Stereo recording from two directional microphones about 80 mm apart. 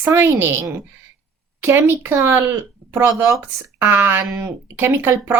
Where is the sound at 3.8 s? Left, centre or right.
Right.